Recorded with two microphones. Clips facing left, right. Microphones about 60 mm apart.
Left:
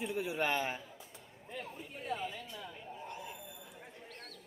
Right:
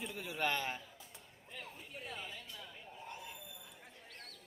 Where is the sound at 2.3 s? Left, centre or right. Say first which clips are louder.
Left 5 dB; centre.